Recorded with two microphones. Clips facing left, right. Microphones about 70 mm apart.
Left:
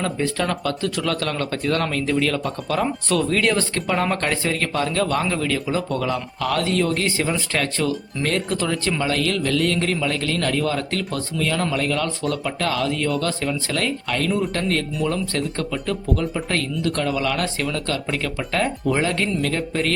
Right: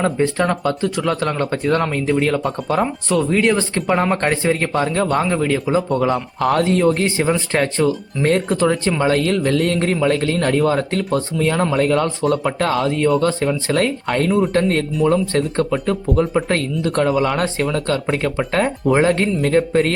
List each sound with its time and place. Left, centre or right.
0.0 s speech: right
2.8 s speech: centre; by 19.9 s right